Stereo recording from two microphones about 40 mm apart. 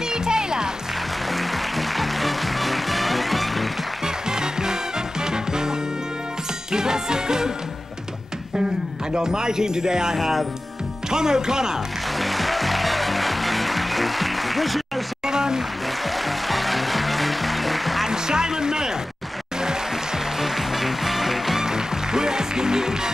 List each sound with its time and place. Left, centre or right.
0.1 s music: centre
1.3 s music: centre
4.0 s music: centre
9.1 s speech: centre
12.2 s music: centre
15.2 s a sound: centre
16.3 s music: centre
18.0 s speech: centre
20.3 s music: centre